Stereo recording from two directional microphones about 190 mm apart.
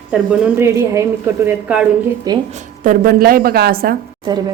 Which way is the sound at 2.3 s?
20° right (ahead or behind).